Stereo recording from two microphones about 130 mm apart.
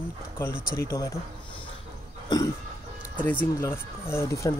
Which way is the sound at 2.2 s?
30° left (ahead or behind).